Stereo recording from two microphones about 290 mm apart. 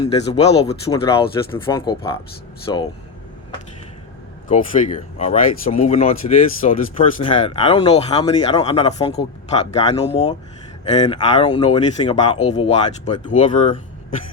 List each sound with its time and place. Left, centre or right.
0.0 s speech: centre
4.4 s speech: left